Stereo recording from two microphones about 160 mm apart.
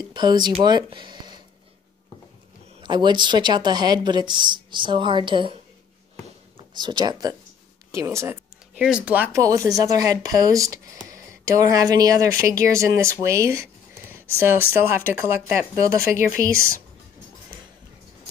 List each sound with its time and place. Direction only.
0.1 s speech: 25° right (ahead or behind)
2.8 s speech: 30° right (ahead or behind)
6.7 s speech: 25° right (ahead or behind)
7.9 s a sound: 20° right (ahead or behind)
8.8 s speech: 5° right (ahead or behind)
9.4 s speech: 20° right (ahead or behind)